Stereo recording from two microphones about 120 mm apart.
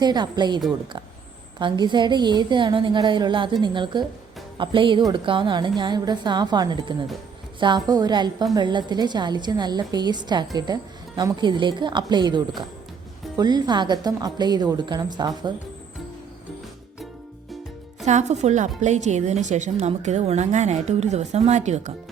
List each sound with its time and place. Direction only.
0.0 s a woman's voice: 35° right (ahead or behind)
18.0 s a woman's voice: 75° right (ahead or behind)
19.7 s a woman's voice: 70° right (ahead or behind)